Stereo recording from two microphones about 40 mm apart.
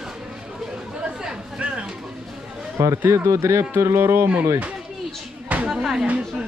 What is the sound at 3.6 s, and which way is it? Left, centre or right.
Speech, right.